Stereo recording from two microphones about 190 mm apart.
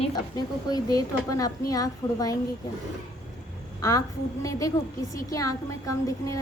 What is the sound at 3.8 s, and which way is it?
A woman's voice, 20° left (ahead or behind).